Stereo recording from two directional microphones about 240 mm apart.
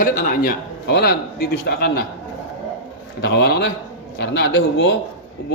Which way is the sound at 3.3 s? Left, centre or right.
Left.